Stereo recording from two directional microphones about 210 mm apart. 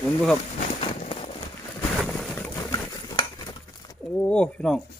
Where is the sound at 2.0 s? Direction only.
Centre (ahead or behind).